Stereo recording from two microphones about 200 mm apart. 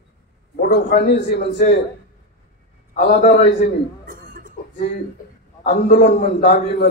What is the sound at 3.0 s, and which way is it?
Speech, 35° left (ahead or behind).